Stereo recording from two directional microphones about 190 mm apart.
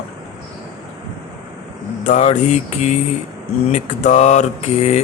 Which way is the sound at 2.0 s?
40° left (ahead or behind).